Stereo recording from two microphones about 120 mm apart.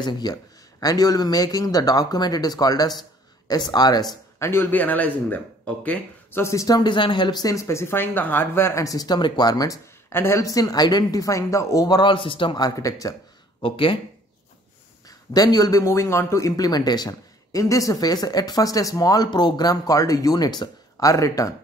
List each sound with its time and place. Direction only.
0.0 s a man's voice: 35° left (ahead or behind)
4.4 s a man's voice: 20° left (ahead or behind); by 12.5 s 45° left (ahead or behind)
12.5 s speech: 30° left (ahead or behind)
13.6 s speech: 50° left (ahead or behind)
15.0 s a man's voice: 30° left (ahead or behind)